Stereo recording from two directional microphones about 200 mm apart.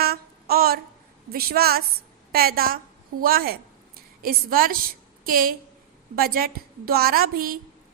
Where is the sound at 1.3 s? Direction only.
50° right (ahead or behind).